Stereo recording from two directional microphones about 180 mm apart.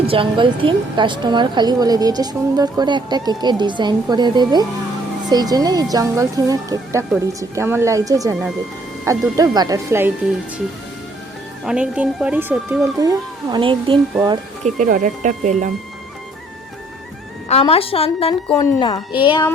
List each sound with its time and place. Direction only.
0.1 s a woman's voice: 30° right (ahead or behind)
11.6 s a woman's voice: 5° right (ahead or behind); by 14.0 s 30° right (ahead or behind)
14.6 s speech: 45° right (ahead or behind)
17.5 s a woman's voice: 30° left (ahead or behind)